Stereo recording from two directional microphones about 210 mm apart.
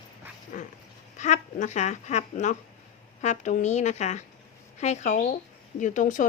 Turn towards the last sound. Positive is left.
turn(degrees=40)  # may be behind; listen again after turning